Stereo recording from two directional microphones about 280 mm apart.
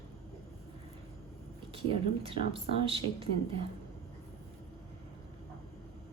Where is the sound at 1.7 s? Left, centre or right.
Centre.